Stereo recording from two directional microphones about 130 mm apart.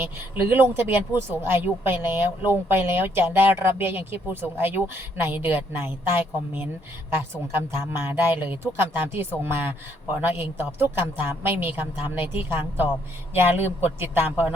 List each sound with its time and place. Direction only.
0.5 s speech: 15° right (ahead or behind)